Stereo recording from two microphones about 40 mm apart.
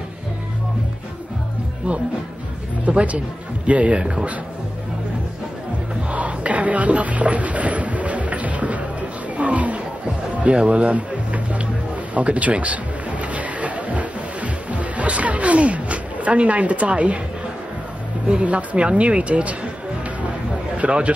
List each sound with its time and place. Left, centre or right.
2.8 s speech: right
6.0 s music: right
9.4 s a sound: right
10.3 s music: right
12.1 s a sound: right
18.4 s speech: right
20.8 s speech: right